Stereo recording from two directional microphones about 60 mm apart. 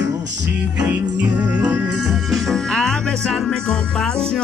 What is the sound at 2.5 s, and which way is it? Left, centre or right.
Music, centre.